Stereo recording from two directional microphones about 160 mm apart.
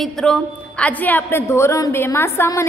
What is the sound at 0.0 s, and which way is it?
A woman's voice, 5° left (ahead or behind).